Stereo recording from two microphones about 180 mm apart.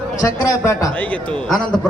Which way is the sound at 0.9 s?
10° left (ahead or behind).